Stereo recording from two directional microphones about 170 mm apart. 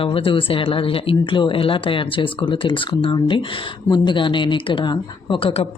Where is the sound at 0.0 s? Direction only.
30° left (ahead or behind).